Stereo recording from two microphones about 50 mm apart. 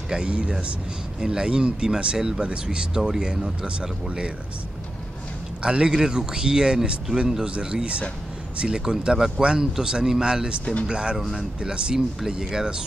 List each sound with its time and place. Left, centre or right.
0.1 s speech: centre
5.6 s speech: centre
10.6 s speech: left
10.9 s speech: centre